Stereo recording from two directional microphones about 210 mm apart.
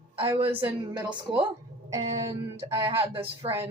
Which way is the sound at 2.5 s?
25° right (ahead or behind).